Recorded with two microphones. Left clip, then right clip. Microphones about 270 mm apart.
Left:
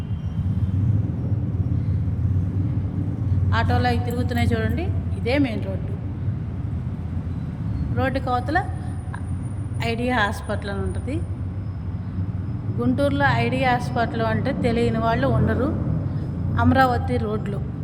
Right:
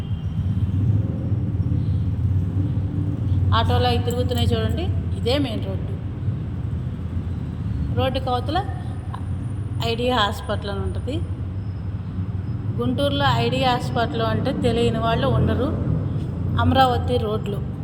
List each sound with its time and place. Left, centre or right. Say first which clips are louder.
3.5 s a woman's voice: right 2 dB; centre
7.9 s a woman's voice: even; centre
9.8 s a woman's voice: right 2 dB; centre
12.8 s a woman's voice: left 1 dB; centre